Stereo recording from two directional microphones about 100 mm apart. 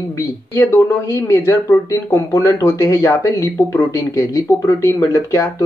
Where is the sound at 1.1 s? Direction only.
30° left (ahead or behind).